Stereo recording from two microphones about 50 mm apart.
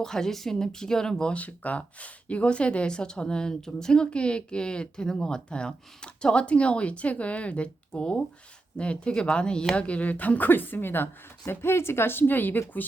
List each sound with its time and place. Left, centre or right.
0.0 s speech: centre
1.3 s speech: left
11.4 s speech: left